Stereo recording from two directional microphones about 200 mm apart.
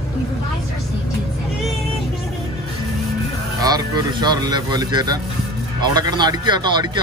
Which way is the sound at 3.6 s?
20° right (ahead or behind).